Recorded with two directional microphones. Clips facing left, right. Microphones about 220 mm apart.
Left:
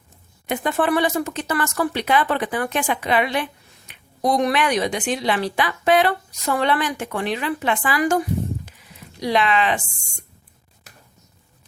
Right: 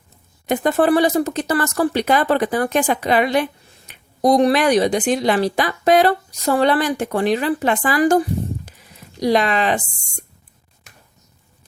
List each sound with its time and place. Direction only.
0.4 s speech: 40° right (ahead or behind)